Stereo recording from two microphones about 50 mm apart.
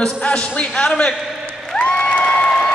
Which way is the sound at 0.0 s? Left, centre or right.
Left.